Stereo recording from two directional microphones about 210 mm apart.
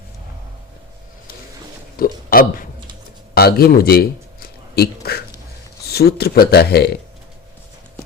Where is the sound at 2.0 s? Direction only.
45° left (ahead or behind).